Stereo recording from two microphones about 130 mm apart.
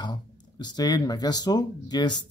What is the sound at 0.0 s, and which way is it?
Speech, 35° left (ahead or behind).